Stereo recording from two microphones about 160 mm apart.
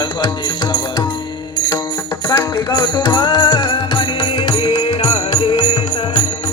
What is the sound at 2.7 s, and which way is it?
Music, 25° left (ahead or behind).